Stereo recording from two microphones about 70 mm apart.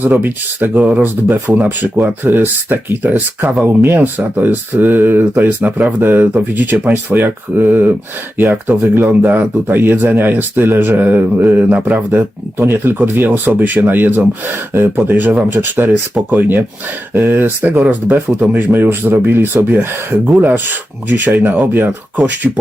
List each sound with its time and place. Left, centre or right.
0.0 s speech: right
12.5 s speech: right